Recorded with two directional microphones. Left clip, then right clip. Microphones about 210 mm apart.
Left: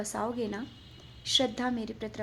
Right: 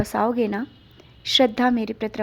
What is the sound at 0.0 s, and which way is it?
A woman's voice, 35° right (ahead or behind).